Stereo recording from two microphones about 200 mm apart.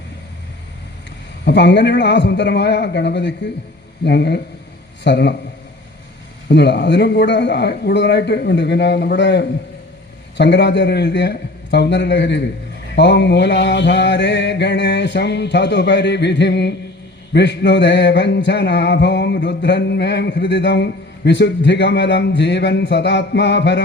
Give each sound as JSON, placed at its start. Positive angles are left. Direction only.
{"t": 1.5, "sound": "mantra", "side_deg": 60}
{"t": 6.5, "sound": "mantra", "side_deg": 60}